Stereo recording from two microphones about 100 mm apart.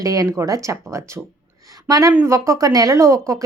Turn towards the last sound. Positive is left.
turn(degrees=-30)  # may be behind; listen again after turning